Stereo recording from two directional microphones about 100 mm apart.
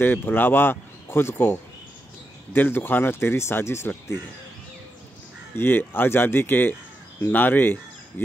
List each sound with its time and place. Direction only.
0.0 s speech: 20° left (ahead or behind)
5.6 s speech: 20° left (ahead or behind)